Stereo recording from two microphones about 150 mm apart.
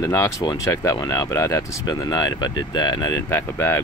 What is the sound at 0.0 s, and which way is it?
Speech, 20° left (ahead or behind).